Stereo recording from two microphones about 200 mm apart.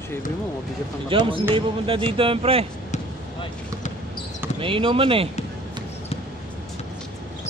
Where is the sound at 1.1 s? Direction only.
25° right (ahead or behind).